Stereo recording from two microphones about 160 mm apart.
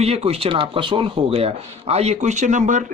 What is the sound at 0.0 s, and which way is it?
Speech, 40° right (ahead or behind).